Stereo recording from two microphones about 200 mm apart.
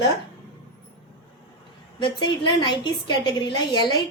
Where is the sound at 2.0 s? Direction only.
25° left (ahead or behind).